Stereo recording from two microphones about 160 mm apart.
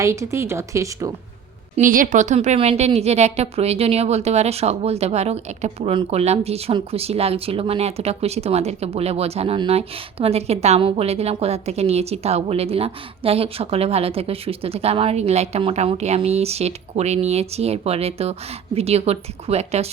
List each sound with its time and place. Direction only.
0.0 s speech: 20° right (ahead or behind)
1.7 s a woman's voice: 60° right (ahead or behind); by 19.9 s 40° right (ahead or behind)